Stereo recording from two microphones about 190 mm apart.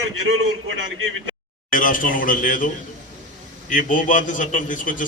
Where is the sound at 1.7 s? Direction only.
45° left (ahead or behind).